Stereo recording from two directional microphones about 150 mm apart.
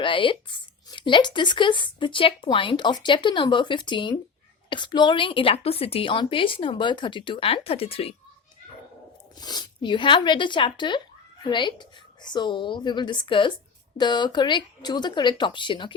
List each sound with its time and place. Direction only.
0.0 s speech: 35° left (ahead or behind)
9.4 s speech: 25° left (ahead or behind)